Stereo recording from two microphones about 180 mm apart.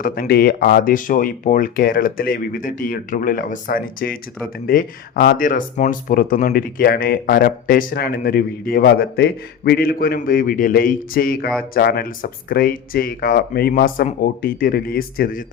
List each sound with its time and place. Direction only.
0.0 s speech: 55° left (ahead or behind)